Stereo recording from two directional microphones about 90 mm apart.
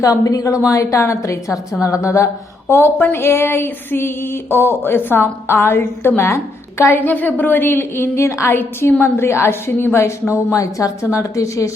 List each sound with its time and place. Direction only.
0.0 s a woman's voice: 40° left (ahead or behind)
1.8 s a sound: 35° left (ahead or behind)
10.5 s a woman's voice: 40° left (ahead or behind)